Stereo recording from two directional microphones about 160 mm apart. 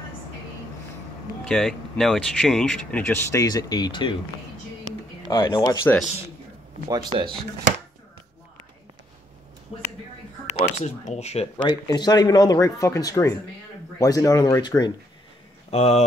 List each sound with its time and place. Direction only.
1.4 s speech: 5° left (ahead or behind); by 4.2 s 30° left (ahead or behind)
5.3 s speech: 30° left (ahead or behind)
6.9 s speech: 25° right (ahead or behind)
10.6 s speech: 45° left (ahead or behind)
11.5 s speech: 30° left (ahead or behind)
15.7 s speech: 40° left (ahead or behind)